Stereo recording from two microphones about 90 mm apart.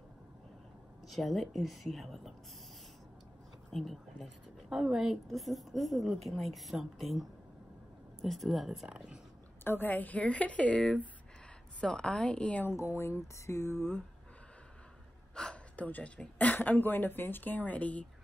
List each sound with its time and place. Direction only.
1.0 s a woman's voice: centre (ahead or behind)
3.7 s a woman's voice: centre (ahead or behind)
9.7 s speech: 20° left (ahead or behind)
12.6 s speech: 30° left (ahead or behind)
15.3 s speech: 10° left (ahead or behind)